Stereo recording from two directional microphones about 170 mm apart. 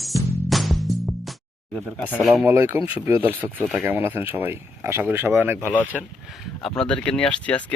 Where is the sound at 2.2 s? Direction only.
5° right (ahead or behind).